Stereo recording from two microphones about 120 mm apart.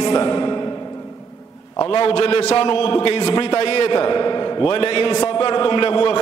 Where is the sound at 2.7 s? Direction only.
45° left (ahead or behind).